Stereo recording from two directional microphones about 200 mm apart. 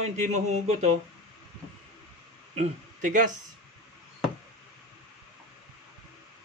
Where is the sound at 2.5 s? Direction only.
40° right (ahead or behind).